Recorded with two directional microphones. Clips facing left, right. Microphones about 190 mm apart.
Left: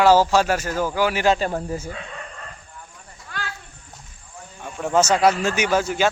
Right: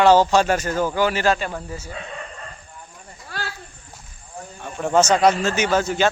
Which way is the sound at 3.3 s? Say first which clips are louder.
Right 2 dB; 35° right (ahead or behind).